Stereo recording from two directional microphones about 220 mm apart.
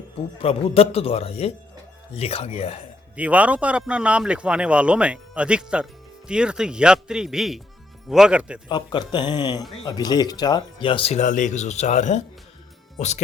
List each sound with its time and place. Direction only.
0.3 s speech: 25° left (ahead or behind)
3.2 s speech: 5° right (ahead or behind)
8.7 s speech: 20° left (ahead or behind)